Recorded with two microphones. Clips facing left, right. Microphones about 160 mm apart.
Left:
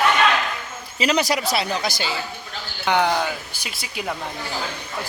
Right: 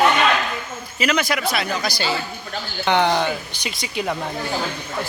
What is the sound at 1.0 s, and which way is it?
Speech, 35° left (ahead or behind).